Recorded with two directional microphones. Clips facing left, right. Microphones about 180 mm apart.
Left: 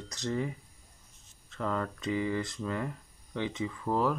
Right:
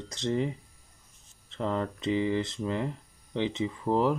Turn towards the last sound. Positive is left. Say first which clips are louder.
# right 3 dB
turn(degrees=-25)  # may be behind; listen again after turning